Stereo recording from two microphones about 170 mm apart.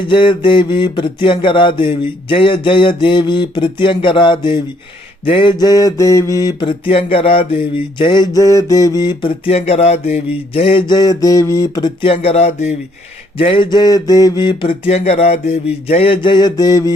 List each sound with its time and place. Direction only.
0.1 s mantra: 30° left (ahead or behind)
12.1 s a sound: 35° left (ahead or behind)
13.4 s mantra: 30° left (ahead or behind)